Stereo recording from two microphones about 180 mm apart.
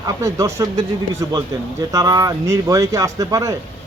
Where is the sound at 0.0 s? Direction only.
20° right (ahead or behind).